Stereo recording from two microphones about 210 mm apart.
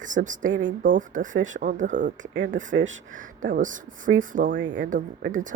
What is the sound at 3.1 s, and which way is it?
Speech, 40° right (ahead or behind).